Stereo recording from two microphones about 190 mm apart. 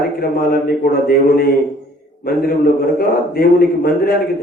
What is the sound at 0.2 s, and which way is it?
A man's voice, 50° left (ahead or behind).